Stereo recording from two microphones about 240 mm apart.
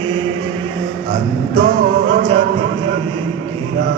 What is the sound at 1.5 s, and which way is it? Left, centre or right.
Music, right.